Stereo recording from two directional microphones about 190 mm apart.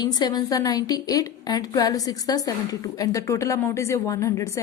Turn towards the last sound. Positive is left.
turn(degrees=15)  # may be behind; listen again after turning